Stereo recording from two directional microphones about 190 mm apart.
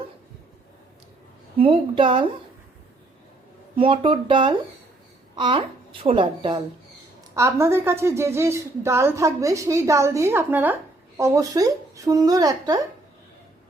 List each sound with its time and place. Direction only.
1.5 s speech: 30° right (ahead or behind)
3.8 s speech: 30° right (ahead or behind)
7.3 s a woman's voice: 15° right (ahead or behind)